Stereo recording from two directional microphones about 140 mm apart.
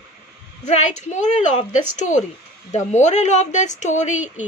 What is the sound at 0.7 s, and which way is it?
Speech, 55° left (ahead or behind).